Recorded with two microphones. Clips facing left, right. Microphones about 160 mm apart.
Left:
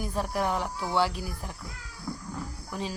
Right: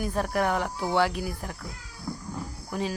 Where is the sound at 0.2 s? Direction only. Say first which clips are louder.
Right 2 dB; 60° right (ahead or behind).